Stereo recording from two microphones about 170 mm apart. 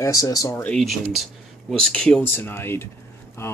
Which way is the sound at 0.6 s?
Centre (ahead or behind).